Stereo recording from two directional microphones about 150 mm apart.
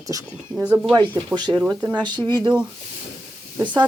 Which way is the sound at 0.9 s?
30° right (ahead or behind).